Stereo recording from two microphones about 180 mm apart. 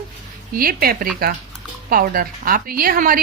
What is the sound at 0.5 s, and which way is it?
A woman's voice, 55° right (ahead or behind).